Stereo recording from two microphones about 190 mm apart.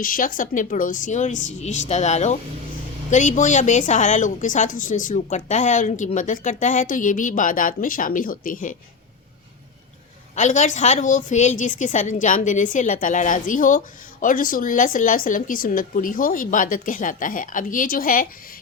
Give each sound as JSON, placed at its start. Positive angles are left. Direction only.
{"t": 0.0, "sound": "a woman's voice", "side_deg": 45}
{"t": 10.3, "sound": "a woman's voice", "side_deg": 40}